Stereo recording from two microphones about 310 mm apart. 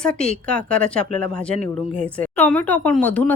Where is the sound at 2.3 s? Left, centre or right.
Centre.